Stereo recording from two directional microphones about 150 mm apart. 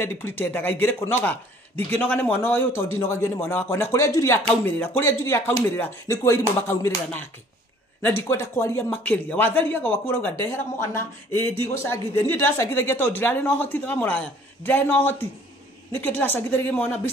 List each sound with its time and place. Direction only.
0.2 s speech: 15° left (ahead or behind)